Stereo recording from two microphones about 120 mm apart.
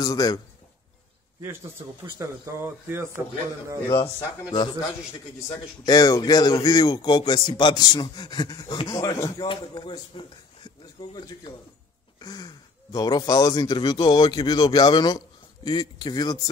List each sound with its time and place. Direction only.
0.0 s speech: 30° left (ahead or behind)
2.0 s speech: 25° right (ahead or behind)
4.0 s speech: 40° left (ahead or behind)
5.9 s speech: 30° left (ahead or behind)
9.5 s speech: 40° left (ahead or behind)